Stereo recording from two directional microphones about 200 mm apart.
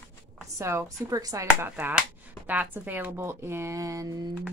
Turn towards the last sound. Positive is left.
turn(degrees=-15)  # may be behind; listen again after turning